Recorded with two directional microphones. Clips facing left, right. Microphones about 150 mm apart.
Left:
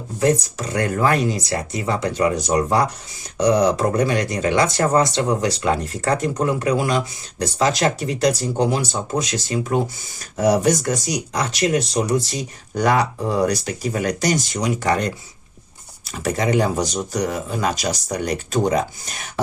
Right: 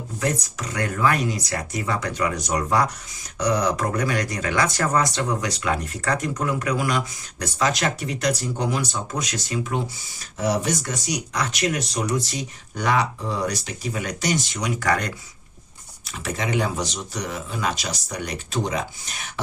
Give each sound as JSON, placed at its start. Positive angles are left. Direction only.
{"t": 0.2, "sound": "speech", "side_deg": 30}
{"t": 10.3, "sound": "speech", "side_deg": 45}
{"t": 14.8, "sound": "speech", "side_deg": 25}
{"t": 16.0, "sound": "speech", "side_deg": 40}